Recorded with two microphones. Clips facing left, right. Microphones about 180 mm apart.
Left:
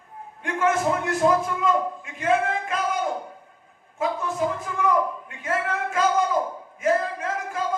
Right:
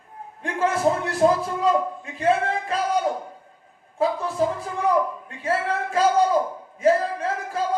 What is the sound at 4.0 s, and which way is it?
A man's voice, 35° right (ahead or behind).